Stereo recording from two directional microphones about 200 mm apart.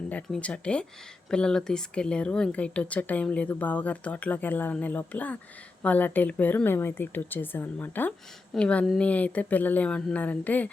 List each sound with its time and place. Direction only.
0.1 s speech: 5° left (ahead or behind)